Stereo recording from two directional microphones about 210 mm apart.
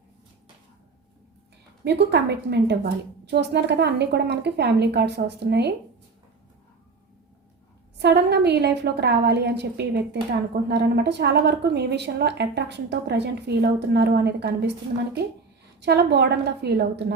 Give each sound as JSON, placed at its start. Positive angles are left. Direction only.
{"t": 1.8, "sound": "a woman's voice", "side_deg": -55}
{"t": 7.9, "sound": "a woman's voice", "side_deg": -50}
{"t": 15.8, "sound": "a woman's voice", "side_deg": -50}